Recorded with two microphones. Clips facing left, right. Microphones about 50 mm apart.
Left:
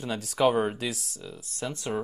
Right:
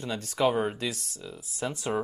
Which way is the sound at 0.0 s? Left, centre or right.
Centre.